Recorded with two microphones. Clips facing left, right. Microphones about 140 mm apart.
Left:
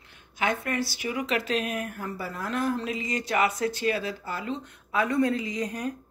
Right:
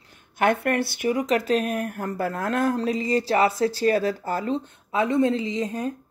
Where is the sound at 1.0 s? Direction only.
40° right (ahead or behind).